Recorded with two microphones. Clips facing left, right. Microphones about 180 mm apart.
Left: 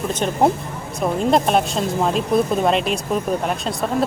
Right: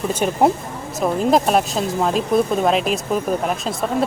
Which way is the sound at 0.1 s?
10° right (ahead or behind).